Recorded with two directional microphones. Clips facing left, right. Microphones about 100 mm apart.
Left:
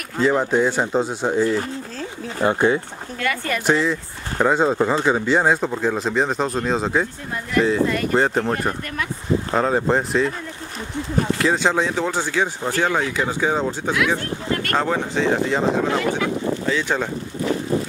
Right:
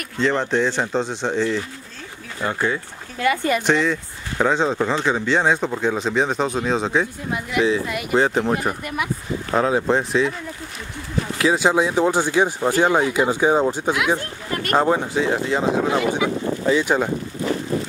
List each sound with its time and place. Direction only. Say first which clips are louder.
0.2 s speech: left 2 dB; 5° left (ahead or behind)
2.4 s speech: left 5 dB; 25° left (ahead or behind)
3.2 s speech: right 4 dB; 20° right (ahead or behind)
3.6 s speech: even; 5° left (ahead or behind)
11.3 s speech: right 4 dB; 5° right (ahead or behind)
15.1 s speech: left 1 dB; 5° right (ahead or behind)